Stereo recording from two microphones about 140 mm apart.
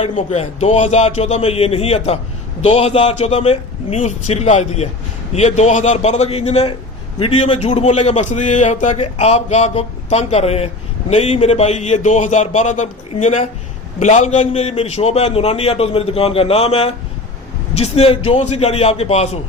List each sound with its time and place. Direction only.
0.3 s a man's voice: 55° left (ahead or behind)